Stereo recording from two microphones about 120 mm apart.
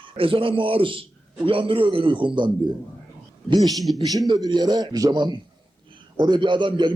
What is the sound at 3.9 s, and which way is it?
A man's voice, 30° right (ahead or behind).